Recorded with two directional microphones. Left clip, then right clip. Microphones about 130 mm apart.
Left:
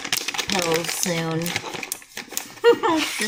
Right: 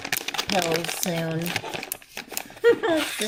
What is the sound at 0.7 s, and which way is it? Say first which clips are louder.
Speech: left 3 dB; 5° right (ahead or behind).